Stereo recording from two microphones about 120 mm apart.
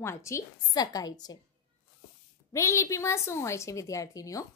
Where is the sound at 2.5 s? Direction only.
25° left (ahead or behind).